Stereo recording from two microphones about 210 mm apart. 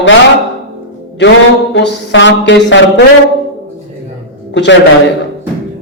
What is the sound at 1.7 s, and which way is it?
A man's voice, 60° left (ahead or behind).